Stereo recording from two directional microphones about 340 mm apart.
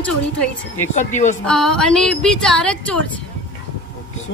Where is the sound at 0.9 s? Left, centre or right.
Left.